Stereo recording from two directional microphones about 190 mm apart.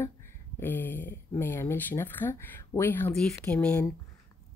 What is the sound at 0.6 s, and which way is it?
Speech, 10° left (ahead or behind).